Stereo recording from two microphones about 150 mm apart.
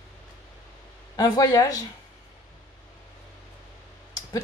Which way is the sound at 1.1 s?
25° left (ahead or behind).